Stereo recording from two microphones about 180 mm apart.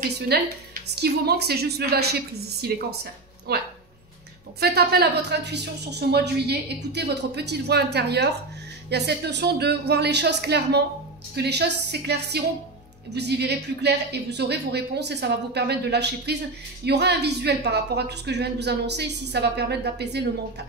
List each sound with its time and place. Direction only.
0.3 s a woman's voice: 60° right (ahead or behind)